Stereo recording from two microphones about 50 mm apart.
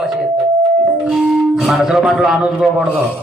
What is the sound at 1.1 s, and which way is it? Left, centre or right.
Music, centre.